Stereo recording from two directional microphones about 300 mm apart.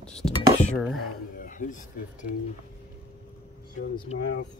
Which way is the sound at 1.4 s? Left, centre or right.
Left.